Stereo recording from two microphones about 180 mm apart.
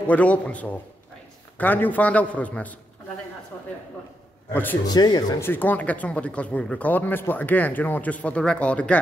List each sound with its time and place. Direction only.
0.0 s speech: 10° left (ahead or behind)
4.6 s speech: 10° left (ahead or behind)
4.9 s speech: 20° left (ahead or behind)
5.5 s speech: 10° left (ahead or behind)